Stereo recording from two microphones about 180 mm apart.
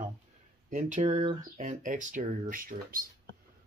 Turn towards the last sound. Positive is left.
turn(degrees=-50)  # may be behind; listen again after turning